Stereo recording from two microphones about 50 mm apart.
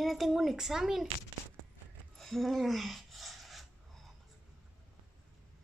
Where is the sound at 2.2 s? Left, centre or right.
Centre.